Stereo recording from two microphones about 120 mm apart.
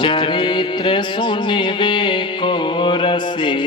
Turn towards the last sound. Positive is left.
turn(degrees=40)  # may be behind; listen again after turning